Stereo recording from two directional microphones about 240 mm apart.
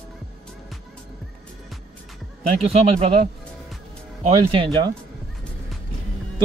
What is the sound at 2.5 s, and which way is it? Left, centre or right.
Speech, right.